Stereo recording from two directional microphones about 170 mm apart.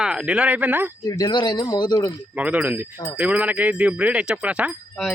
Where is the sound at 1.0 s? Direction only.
25° left (ahead or behind).